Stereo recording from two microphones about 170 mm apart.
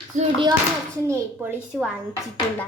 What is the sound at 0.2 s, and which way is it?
Speech, 30° right (ahead or behind).